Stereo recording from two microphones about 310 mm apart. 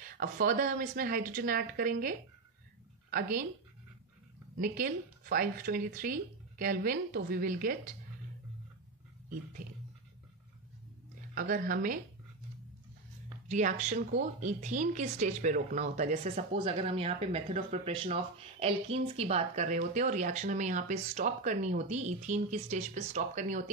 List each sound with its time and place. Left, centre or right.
0.0 s speech: right
4.6 s speech: right
11.3 s speech: right
13.5 s speech: right